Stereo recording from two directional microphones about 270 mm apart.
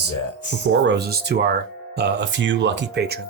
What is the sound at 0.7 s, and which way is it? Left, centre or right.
Speech, right.